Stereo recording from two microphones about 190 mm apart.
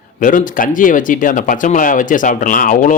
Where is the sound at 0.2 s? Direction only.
45° left (ahead or behind).